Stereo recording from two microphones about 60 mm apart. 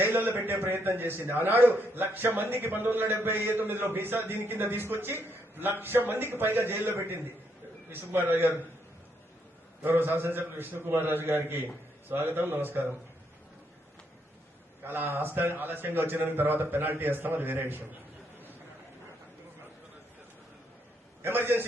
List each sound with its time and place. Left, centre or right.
0.0 s a sound: right
0.3 s a man's voice: right
9.8 s a man's voice: right
14.8 s a man's voice: right
21.2 s a man's voice: right